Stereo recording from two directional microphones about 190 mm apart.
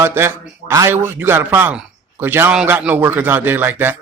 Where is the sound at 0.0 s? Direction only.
15° right (ahead or behind).